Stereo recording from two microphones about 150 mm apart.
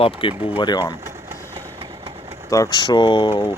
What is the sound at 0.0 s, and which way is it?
Speech, 35° left (ahead or behind).